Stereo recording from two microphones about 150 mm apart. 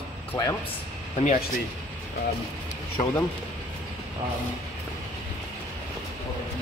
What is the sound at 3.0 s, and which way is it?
Speech, 45° left (ahead or behind).